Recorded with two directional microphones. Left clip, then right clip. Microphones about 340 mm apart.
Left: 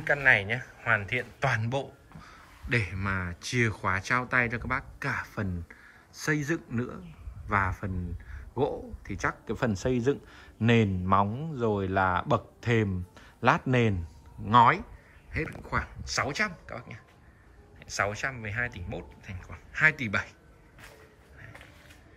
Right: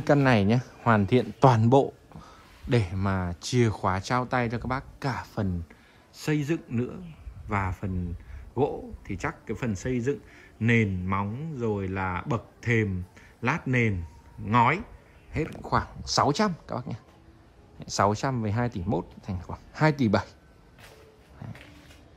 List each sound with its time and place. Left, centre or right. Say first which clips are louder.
0.0 s speech: right 3 dB; right
0.3 s speech: left 1 dB; centre
9.5 s speech: left 3 dB; centre
10.8 s speech: left 4 dB; centre
13.4 s speech: left 2 dB; centre